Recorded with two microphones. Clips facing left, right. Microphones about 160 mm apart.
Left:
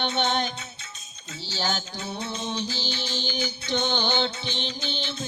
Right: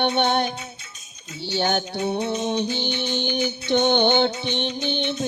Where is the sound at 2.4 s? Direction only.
60° right (ahead or behind).